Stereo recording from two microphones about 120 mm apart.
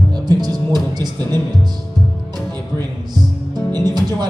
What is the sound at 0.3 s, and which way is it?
Music, 35° right (ahead or behind).